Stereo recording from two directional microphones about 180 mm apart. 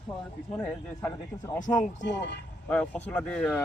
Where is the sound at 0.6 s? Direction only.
15° left (ahead or behind).